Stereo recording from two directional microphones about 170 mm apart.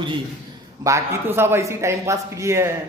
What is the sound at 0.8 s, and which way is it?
Speech, 15° right (ahead or behind).